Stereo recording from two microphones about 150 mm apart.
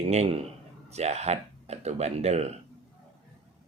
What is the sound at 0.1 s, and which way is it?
Speech, 45° right (ahead or behind).